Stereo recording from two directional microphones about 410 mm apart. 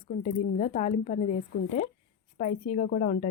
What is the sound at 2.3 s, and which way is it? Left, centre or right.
Speech, centre.